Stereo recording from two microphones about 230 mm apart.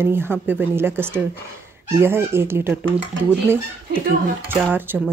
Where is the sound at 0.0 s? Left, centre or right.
Centre.